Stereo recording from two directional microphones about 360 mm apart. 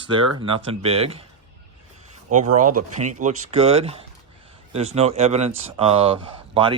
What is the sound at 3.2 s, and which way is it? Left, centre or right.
Speech, centre.